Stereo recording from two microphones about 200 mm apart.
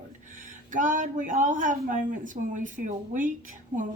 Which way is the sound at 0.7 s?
40° right (ahead or behind).